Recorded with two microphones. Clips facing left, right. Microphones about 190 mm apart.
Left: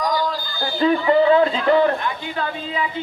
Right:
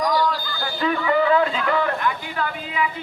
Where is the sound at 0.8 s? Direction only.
30° left (ahead or behind).